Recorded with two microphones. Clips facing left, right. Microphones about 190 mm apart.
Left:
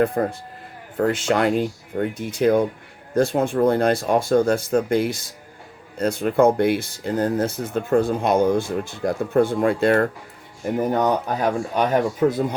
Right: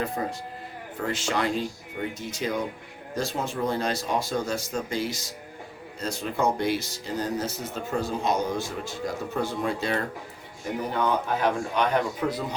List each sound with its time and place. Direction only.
0.0 s speech: 55° left (ahead or behind)
10.8 s speech: 45° left (ahead or behind)